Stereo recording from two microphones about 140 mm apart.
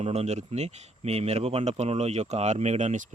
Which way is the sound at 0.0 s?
50° right (ahead or behind).